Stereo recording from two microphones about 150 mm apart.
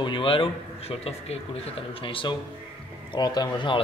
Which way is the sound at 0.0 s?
35° left (ahead or behind).